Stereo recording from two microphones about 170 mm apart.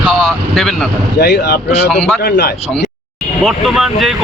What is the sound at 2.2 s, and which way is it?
Speech, 60° left (ahead or behind).